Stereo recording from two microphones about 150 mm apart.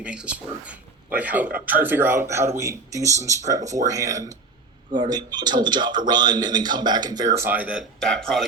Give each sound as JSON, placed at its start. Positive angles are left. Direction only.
{"t": 0.0, "sound": "a man's voice", "side_deg": -10}
{"t": 7.3, "sound": "a man's voice", "side_deg": -15}
{"t": 7.9, "sound": "a man's voice", "side_deg": 5}